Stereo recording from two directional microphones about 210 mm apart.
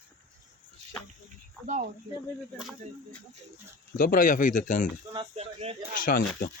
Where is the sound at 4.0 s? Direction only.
40° left (ahead or behind).